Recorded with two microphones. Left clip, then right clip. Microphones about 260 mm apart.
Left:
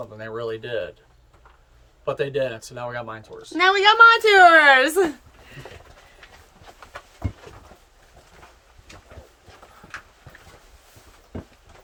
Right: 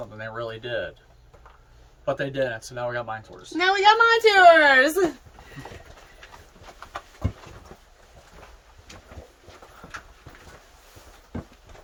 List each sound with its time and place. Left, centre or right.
0.2 s speech: left
2.0 s speech: left
3.5 s a woman's voice: centre